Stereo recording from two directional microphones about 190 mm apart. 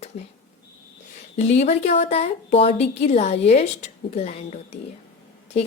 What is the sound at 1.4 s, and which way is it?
A woman's voice, 35° left (ahead or behind).